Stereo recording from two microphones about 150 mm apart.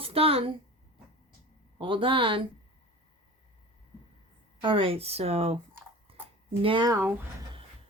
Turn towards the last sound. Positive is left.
turn(degrees=-15)  # may be behind; listen again after turning